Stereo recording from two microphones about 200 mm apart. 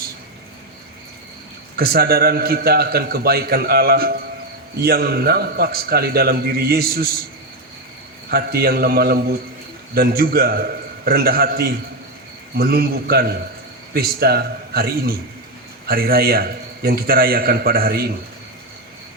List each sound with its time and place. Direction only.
1.7 s a man's voice: 50° right (ahead or behind)
8.3 s a man's voice: 50° right (ahead or behind)